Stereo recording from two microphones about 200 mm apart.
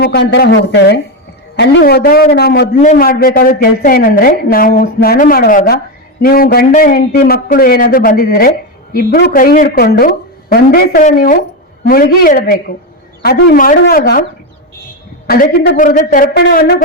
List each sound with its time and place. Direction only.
0.0 s a man's voice: 55° left (ahead or behind)
2.7 s a man's voice: 35° left (ahead or behind)
15.3 s a man's voice: 50° left (ahead or behind)